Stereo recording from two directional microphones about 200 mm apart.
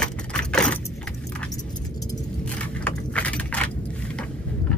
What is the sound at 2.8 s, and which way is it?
Keys jangling, 5° left (ahead or behind).